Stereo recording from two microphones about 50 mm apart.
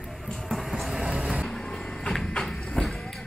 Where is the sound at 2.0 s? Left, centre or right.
Centre.